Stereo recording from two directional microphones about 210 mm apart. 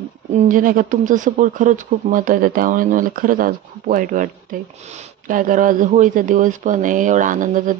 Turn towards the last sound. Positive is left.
turn(degrees=-40)  # may be behind; listen again after turning